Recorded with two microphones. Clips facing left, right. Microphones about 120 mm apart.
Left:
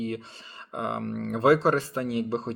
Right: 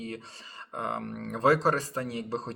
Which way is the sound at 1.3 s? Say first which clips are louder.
Left 3 dB; 40° right (ahead or behind).